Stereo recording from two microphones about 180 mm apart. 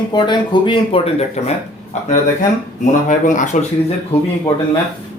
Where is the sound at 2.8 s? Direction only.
45° left (ahead or behind).